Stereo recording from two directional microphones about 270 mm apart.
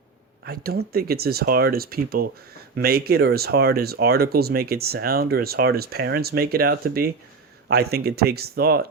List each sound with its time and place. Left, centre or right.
0.4 s speech: right